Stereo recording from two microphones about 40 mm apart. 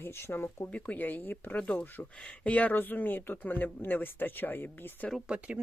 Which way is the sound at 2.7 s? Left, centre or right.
Left.